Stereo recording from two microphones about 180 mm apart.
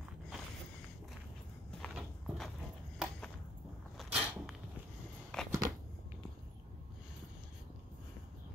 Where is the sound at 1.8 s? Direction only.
Centre (ahead or behind).